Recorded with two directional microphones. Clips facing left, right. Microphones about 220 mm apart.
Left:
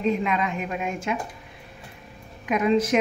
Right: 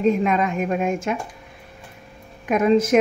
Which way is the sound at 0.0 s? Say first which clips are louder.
Right 5 dB; 45° right (ahead or behind).